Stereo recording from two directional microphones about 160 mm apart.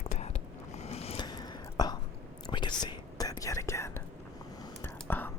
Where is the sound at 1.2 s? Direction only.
25° left (ahead or behind).